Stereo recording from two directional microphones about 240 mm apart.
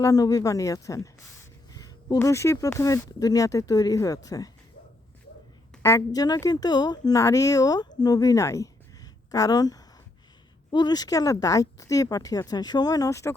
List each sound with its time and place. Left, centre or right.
0.0 s speech: centre
1.7 s a sound: centre
2.1 s speech: centre
5.8 s speech: centre